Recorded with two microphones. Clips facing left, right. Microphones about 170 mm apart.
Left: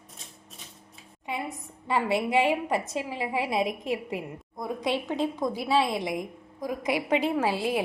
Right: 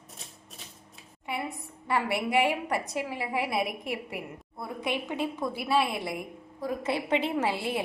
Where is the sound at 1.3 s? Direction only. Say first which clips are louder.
Left 1 dB; 15° left (ahead or behind).